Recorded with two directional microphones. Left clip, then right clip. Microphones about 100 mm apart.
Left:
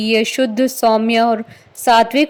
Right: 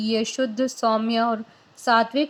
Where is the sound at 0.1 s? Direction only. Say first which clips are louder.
Left 9 dB; 65° left (ahead or behind).